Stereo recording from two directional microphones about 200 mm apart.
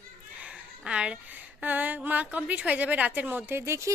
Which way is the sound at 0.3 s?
5° right (ahead or behind).